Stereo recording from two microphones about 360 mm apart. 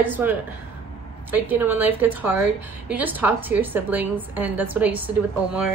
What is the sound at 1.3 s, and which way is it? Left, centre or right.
A woman's voice, centre.